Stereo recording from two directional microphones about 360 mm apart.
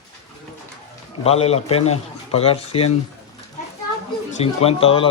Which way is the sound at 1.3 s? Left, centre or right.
Centre.